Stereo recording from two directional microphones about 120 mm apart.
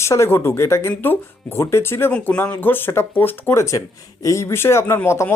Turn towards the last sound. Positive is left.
turn(degrees=15)  # may be behind; listen again after turning